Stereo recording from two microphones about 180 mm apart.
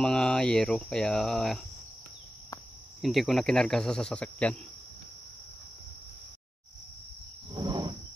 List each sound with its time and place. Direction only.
0.0 s cricket: 5° left (ahead or behind)
3.0 s cricket: centre (ahead or behind)
7.5 s insect: 25° right (ahead or behind)